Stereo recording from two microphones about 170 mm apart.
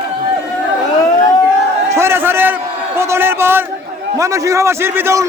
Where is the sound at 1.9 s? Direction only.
15° right (ahead or behind).